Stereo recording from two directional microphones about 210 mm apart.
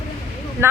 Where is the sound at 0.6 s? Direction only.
10° right (ahead or behind).